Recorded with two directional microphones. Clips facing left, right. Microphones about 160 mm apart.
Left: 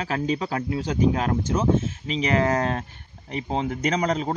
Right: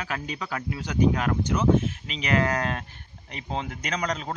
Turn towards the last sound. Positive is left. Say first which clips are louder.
# left 6 dB
turn(degrees=30)  # may be behind; listen again after turning